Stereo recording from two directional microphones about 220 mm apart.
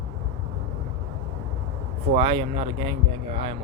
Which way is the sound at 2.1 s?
25° right (ahead or behind).